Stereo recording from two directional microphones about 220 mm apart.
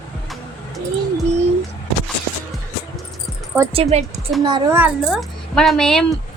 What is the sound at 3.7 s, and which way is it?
A child's voice, 30° right (ahead or behind).